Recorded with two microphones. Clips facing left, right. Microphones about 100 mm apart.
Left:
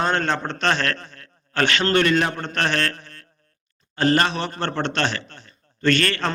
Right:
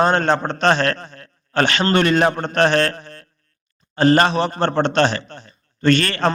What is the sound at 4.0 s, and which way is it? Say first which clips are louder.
A man's voice: right 5 dB; 25° right (ahead or behind).